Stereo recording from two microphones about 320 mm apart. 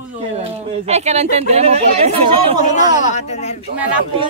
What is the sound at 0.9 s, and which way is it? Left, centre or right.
Speech, centre.